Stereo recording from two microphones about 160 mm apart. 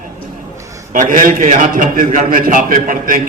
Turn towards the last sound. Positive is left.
turn(degrees=-55)  # may be behind; listen again after turning